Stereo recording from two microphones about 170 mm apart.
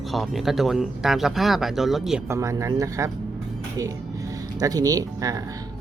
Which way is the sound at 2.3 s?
15° right (ahead or behind).